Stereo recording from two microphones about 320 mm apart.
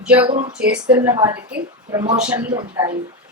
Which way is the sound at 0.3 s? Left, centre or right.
Centre.